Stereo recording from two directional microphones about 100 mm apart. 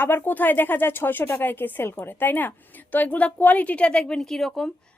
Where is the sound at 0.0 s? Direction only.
20° left (ahead or behind).